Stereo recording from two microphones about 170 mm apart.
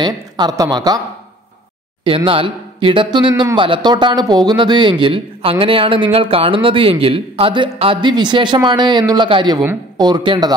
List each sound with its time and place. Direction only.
0.0 s speech: 25° right (ahead or behind)
2.0 s speech: 30° right (ahead or behind)